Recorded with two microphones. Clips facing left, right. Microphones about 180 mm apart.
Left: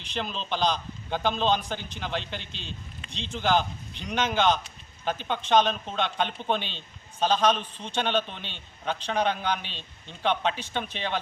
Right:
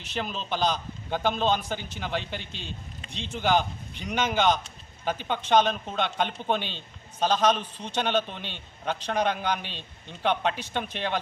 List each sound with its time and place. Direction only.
0.0 s a man's voice: 10° right (ahead or behind)
2.4 s speech: 50° right (ahead or behind)
3.1 s a man's voice: 10° right (ahead or behind)